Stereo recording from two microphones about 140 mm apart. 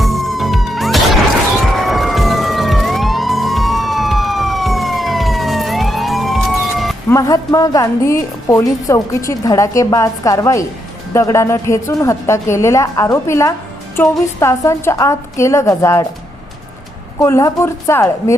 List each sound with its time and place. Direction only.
0.0 s music: centre (ahead or behind)
1.7 s police car: centre (ahead or behind)
7.1 s a woman's voice: 25° left (ahead or behind)
17.2 s a woman's voice: 20° left (ahead or behind)